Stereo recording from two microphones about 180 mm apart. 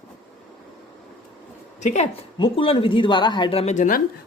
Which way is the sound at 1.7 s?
40° left (ahead or behind).